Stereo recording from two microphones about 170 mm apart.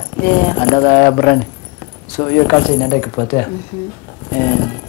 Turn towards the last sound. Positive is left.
turn(degrees=25)  # may be behind; listen again after turning